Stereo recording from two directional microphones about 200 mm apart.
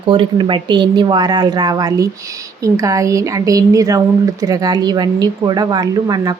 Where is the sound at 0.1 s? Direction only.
25° right (ahead or behind).